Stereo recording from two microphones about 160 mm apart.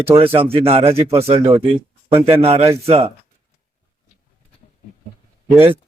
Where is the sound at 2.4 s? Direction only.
40° right (ahead or behind).